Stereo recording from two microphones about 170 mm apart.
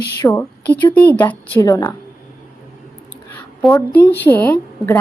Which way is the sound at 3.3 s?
10° left (ahead or behind).